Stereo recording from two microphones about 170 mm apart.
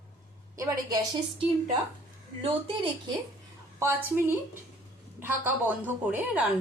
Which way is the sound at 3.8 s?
10° right (ahead or behind).